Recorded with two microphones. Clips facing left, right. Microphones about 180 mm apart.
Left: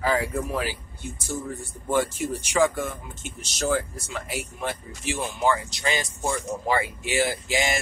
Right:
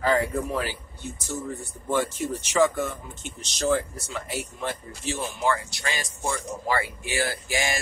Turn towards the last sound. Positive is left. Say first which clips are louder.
# left 2 dB
turn(degrees=20)  # may be behind; listen again after turning